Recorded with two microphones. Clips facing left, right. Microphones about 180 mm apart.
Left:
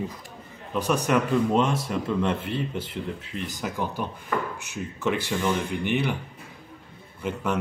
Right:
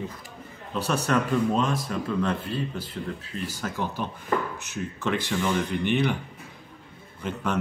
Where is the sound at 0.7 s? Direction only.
15° left (ahead or behind).